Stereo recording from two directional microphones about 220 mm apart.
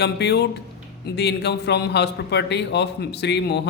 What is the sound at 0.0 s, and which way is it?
A man's voice, 50° left (ahead or behind).